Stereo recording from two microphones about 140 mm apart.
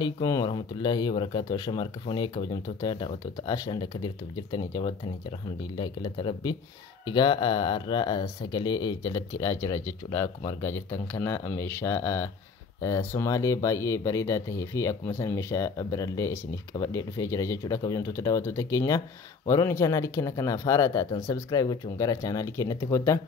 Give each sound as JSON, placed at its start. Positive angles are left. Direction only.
{"t": 0.0, "sound": "speech", "side_deg": 25}